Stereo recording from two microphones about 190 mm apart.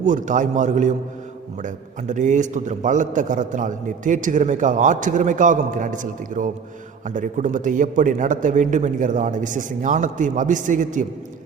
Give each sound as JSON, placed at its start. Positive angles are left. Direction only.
{"t": 0.0, "sound": "a man's voice", "side_deg": -40}